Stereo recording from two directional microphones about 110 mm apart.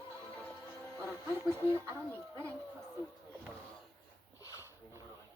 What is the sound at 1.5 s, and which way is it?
Speech, 25° right (ahead or behind).